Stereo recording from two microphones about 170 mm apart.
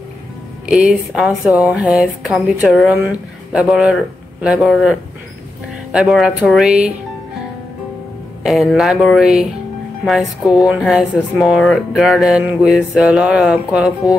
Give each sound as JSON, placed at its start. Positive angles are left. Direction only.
{"t": 0.7, "sound": "speech", "side_deg": -5}
{"t": 8.5, "sound": "speech", "side_deg": 0}
{"t": 10.6, "sound": "speech", "side_deg": -5}